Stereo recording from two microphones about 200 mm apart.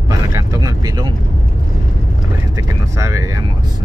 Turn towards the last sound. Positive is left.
turn(degrees=-15)  # may be behind; listen again after turning